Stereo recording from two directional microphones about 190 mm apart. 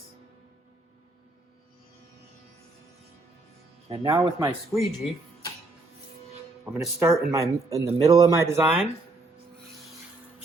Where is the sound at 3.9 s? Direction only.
30° right (ahead or behind).